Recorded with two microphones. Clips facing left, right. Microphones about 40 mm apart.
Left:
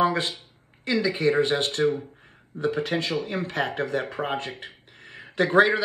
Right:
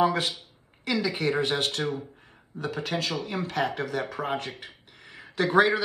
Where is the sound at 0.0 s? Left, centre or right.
Left.